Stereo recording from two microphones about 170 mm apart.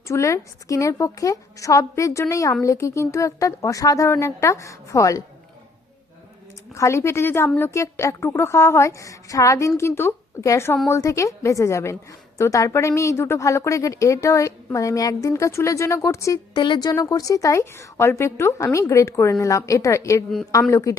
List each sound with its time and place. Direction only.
0.1 s a woman's voice: 20° left (ahead or behind)
6.7 s a woman's voice: 15° left (ahead or behind)